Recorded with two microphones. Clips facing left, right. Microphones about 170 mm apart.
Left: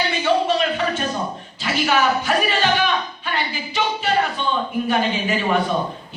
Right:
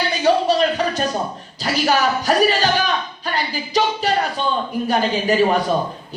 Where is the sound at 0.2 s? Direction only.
40° right (ahead or behind).